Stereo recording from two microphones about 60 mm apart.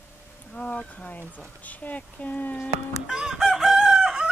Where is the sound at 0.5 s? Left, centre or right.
Left.